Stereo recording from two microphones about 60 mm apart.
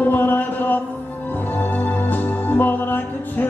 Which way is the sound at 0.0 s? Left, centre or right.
Left.